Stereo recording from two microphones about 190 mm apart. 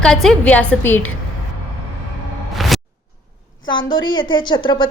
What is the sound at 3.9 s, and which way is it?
Speech, 25° left (ahead or behind).